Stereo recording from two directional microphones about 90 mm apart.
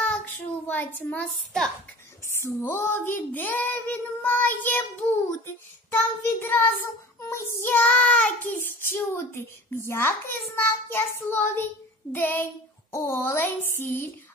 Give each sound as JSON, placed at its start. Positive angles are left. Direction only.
{"t": 0.0, "sound": "child singing", "side_deg": 15}
{"t": 2.4, "sound": "a child's voice", "side_deg": 25}
{"t": 5.9, "sound": "a child's voice", "side_deg": 25}
{"t": 8.8, "sound": "a child's voice", "side_deg": 25}